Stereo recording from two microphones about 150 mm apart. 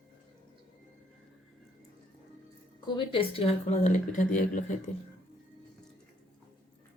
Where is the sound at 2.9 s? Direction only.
35° left (ahead or behind).